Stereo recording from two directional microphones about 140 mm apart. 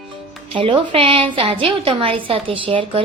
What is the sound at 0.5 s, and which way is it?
Speech, 40° right (ahead or behind).